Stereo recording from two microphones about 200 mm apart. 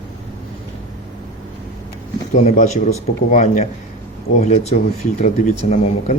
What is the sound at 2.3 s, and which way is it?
Speech, 35° left (ahead or behind).